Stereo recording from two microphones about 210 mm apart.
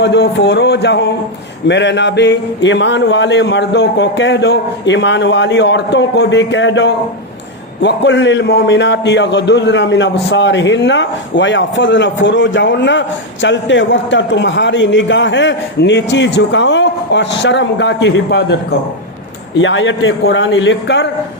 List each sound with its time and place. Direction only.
0.0 s a man's voice: 55° left (ahead or behind)
19.5 s a man's voice: 65° left (ahead or behind)